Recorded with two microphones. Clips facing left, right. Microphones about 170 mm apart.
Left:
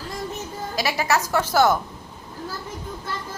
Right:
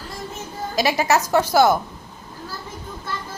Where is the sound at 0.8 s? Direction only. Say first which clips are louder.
Right 4 dB; 20° right (ahead or behind).